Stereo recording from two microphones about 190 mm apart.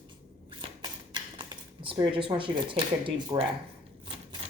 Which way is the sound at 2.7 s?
25° right (ahead or behind).